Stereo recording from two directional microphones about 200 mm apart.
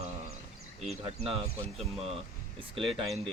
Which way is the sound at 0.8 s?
30° right (ahead or behind).